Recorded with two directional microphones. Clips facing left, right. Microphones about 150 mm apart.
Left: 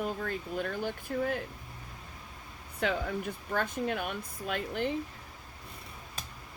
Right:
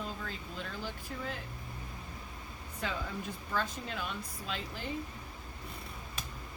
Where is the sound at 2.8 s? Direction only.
65° left (ahead or behind).